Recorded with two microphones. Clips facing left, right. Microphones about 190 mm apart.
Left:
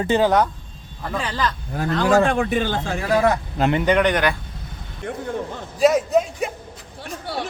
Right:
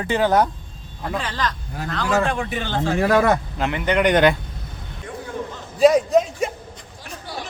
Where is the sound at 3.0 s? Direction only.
55° right (ahead or behind).